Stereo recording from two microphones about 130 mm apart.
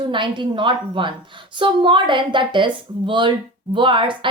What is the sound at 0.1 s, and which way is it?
A woman's voice, 40° right (ahead or behind).